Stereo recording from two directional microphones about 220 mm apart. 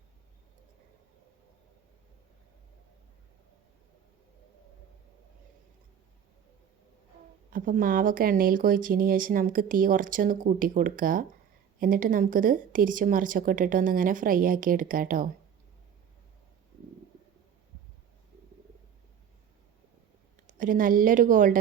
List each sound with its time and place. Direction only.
7.5 s speech: 40° right (ahead or behind)
20.6 s speech: 40° right (ahead or behind)